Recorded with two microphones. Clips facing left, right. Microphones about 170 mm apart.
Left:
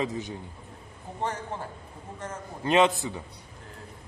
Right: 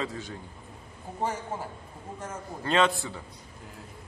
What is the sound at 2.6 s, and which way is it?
Speech, 20° left (ahead or behind).